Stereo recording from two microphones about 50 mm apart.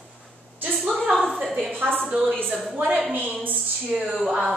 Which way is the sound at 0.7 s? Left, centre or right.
Centre.